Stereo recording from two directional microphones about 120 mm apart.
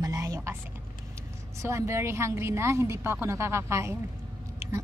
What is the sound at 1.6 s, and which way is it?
A woman's voice, 25° right (ahead or behind).